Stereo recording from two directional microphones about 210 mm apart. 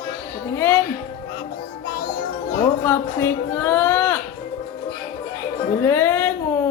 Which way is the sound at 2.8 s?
10° left (ahead or behind).